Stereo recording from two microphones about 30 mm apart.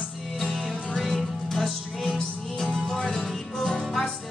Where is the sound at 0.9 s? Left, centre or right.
Centre.